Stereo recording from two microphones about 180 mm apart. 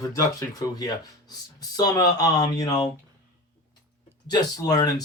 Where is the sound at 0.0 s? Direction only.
20° left (ahead or behind).